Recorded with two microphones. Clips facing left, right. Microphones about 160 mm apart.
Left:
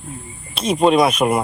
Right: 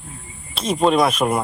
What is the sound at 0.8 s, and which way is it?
Speech, 10° left (ahead or behind).